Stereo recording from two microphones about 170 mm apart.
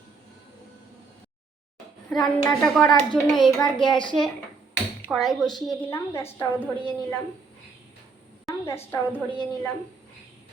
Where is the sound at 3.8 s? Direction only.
25° left (ahead or behind).